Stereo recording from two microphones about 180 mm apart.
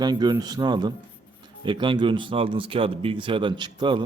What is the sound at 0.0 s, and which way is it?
Speech, 25° right (ahead or behind).